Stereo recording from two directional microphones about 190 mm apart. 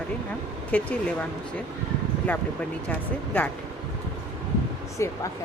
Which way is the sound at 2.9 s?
10° left (ahead or behind).